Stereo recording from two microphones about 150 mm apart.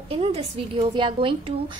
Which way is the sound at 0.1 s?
40° right (ahead or behind).